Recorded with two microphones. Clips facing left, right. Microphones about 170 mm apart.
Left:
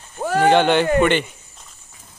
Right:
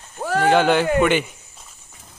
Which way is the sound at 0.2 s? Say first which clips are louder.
Left 2 dB; centre (ahead or behind).